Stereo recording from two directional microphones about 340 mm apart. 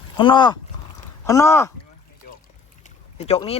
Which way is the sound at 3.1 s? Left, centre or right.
Centre.